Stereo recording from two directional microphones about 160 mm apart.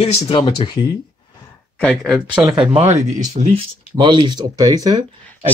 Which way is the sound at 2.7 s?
45° right (ahead or behind).